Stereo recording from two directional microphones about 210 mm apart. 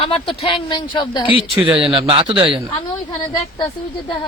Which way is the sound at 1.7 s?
25° right (ahead or behind).